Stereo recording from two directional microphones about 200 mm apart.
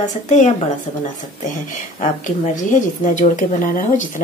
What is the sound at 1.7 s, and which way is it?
A woman's voice, 40° left (ahead or behind).